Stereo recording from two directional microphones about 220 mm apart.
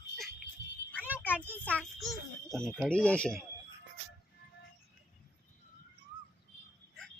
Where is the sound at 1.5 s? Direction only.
5° left (ahead or behind).